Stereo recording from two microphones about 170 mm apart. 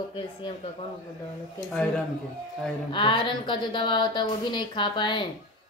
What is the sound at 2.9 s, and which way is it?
A woman's voice, 30° left (ahead or behind).